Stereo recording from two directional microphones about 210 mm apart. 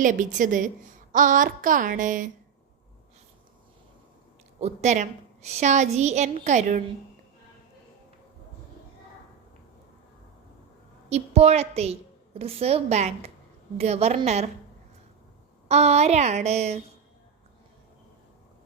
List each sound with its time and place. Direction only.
0.0 s a woman's voice: 35° right (ahead or behind)
4.6 s a woman's voice: 35° right (ahead or behind)
11.1 s a woman's voice: 30° right (ahead or behind)
15.7 s a woman's voice: 30° right (ahead or behind)